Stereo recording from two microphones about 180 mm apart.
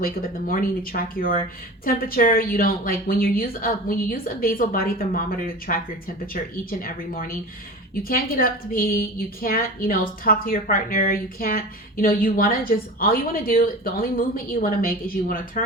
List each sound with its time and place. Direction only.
0.0 s a woman's voice: 50° left (ahead or behind)